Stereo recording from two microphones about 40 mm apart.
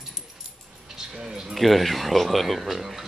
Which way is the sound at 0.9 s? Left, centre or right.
Centre.